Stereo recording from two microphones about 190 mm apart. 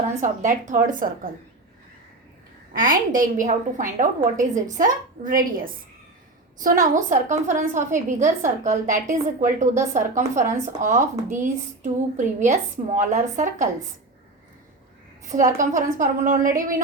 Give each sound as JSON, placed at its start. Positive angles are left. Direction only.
{"t": 0.2, "sound": "a woman's voice", "side_deg": -40}
{"t": 2.7, "sound": "a woman's voice", "side_deg": -45}
{"t": 15.3, "sound": "a woman's voice", "side_deg": -40}